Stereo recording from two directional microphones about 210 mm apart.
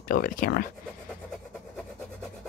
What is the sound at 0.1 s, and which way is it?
Speech, 45° left (ahead or behind).